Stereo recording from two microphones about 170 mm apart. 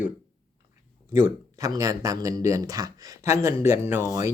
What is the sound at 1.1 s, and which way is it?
Speech, 15° right (ahead or behind).